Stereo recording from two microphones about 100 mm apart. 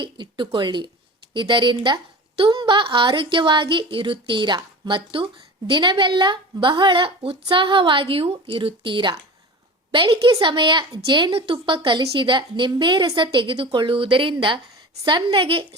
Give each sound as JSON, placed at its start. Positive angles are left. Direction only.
{"t": 0.0, "sound": "a woman's voice", "side_deg": -55}